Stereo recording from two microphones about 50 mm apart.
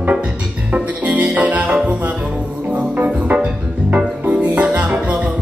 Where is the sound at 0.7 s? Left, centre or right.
Right.